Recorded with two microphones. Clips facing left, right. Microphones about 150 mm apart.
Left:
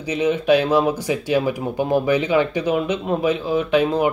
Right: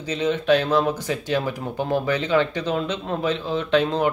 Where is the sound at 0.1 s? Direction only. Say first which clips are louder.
Left 3 dB; 10° left (ahead or behind).